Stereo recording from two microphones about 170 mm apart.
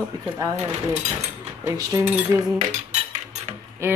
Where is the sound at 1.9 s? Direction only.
20° right (ahead or behind).